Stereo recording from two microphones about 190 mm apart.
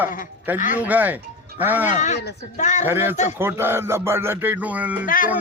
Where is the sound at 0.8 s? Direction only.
10° right (ahead or behind).